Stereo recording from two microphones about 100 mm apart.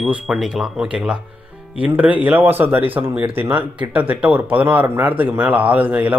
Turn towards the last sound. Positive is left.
turn(degrees=-15)  # may be behind; listen again after turning